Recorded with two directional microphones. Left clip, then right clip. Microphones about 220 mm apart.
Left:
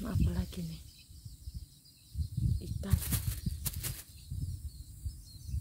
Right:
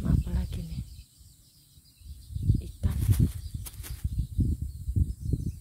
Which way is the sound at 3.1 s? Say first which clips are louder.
Right 6 dB; 25° left (ahead or behind).